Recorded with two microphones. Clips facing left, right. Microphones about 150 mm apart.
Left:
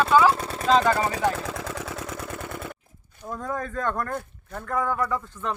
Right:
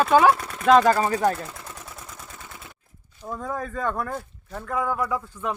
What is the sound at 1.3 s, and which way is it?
Vehicle, 90° left.